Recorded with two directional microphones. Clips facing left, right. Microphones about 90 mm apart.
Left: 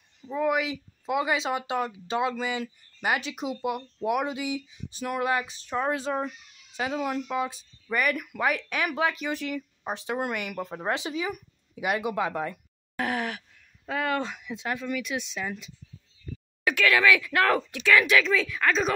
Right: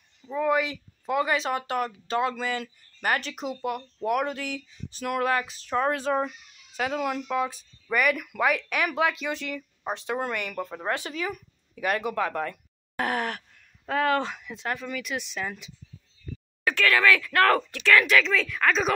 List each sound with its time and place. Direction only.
0.2 s speech: 15° left (ahead or behind)
9.2 s speech: 15° left (ahead or behind)
12.9 s groan: centre (ahead or behind)
13.8 s speech: 5° left (ahead or behind)
16.6 s speech: 15° left (ahead or behind)